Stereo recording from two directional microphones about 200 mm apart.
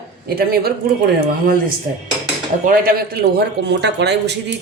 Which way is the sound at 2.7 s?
50° right (ahead or behind).